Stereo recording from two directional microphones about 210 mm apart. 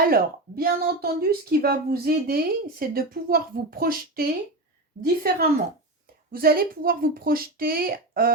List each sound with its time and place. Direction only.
0.1 s a woman's voice: 45° right (ahead or behind)